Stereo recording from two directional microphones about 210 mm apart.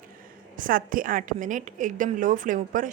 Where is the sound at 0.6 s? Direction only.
40° right (ahead or behind).